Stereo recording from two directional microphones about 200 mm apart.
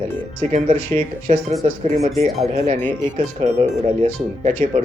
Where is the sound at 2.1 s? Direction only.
Centre (ahead or behind).